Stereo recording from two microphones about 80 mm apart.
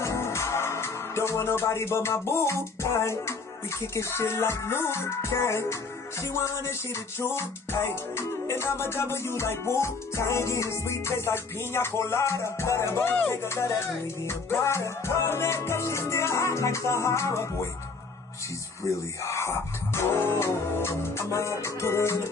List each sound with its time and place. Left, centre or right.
0.0 s music: left
18.9 s music: left